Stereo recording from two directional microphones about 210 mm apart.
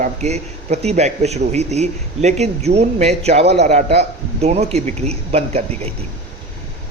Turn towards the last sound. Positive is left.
turn(degrees=-30)  # may be behind; listen again after turning